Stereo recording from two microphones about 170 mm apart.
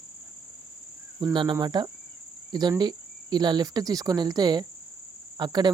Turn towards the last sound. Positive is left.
turn(degrees=-25)  # may be behind; listen again after turning